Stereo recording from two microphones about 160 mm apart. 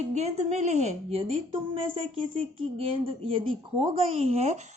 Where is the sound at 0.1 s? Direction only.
45° right (ahead or behind).